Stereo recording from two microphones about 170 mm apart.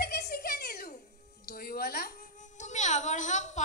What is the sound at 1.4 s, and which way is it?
Music, 65° left (ahead or behind).